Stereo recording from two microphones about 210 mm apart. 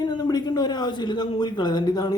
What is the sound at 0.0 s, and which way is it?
Speech, 20° left (ahead or behind).